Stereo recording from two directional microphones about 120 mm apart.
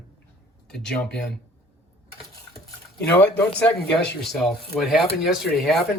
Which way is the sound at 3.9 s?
Centre (ahead or behind).